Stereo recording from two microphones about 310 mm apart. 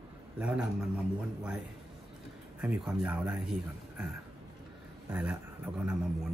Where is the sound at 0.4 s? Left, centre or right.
Centre.